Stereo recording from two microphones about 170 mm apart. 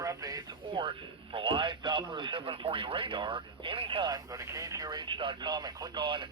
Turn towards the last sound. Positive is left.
turn(degrees=-30)  # may be behind; listen again after turning